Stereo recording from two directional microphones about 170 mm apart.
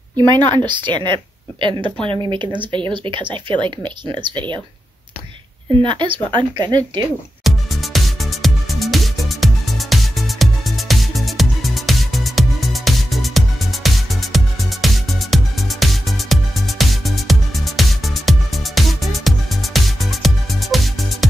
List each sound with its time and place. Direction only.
0.3 s a woman's voice: 25° right (ahead or behind)
5.8 s a woman's voice: 30° right (ahead or behind)
7.4 s music: centre (ahead or behind)